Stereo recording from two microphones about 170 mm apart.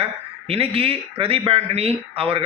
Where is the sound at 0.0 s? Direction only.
35° right (ahead or behind).